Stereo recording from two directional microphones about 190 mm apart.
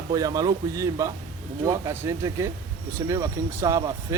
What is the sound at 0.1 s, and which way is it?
Speech, 20° right (ahead or behind).